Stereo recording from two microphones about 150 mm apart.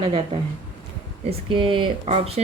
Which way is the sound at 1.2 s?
35° right (ahead or behind).